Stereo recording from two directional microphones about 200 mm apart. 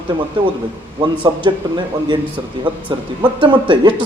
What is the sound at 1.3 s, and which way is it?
Speech, 20° right (ahead or behind).